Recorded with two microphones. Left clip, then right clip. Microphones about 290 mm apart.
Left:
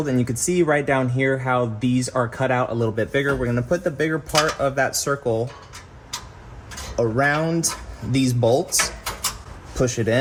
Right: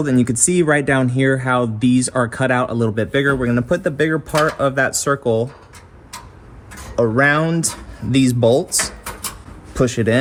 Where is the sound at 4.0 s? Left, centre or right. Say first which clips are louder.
Right 4 dB; right.